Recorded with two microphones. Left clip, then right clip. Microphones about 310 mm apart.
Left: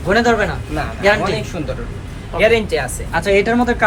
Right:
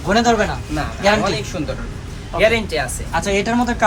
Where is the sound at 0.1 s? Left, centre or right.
Centre.